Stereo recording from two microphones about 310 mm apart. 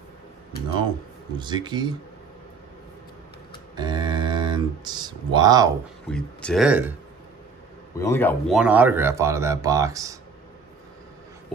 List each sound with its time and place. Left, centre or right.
1.4 s speech: centre
3.7 s a sound: centre
6.0 s speech: centre
8.0 s speech: centre